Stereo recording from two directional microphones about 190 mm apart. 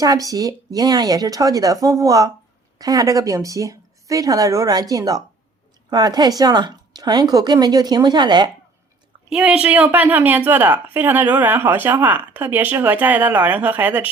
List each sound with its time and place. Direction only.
0.0 s speech: 20° right (ahead or behind)
9.3 s a woman's voice: 5° right (ahead or behind)